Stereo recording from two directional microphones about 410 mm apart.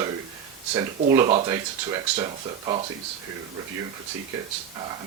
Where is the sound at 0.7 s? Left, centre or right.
Centre.